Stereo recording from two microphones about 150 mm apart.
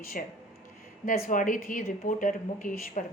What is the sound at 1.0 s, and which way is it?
Speech, 60° left (ahead or behind).